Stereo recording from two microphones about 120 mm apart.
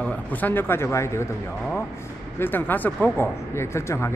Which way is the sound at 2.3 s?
15° left (ahead or behind).